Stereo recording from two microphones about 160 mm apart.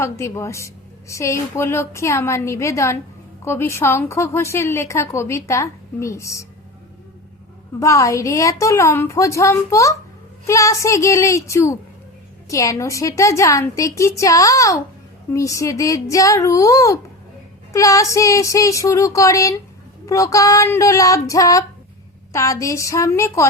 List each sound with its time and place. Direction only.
0.0 s a woman's voice: 15° left (ahead or behind)
7.8 s a woman's voice: 20° left (ahead or behind)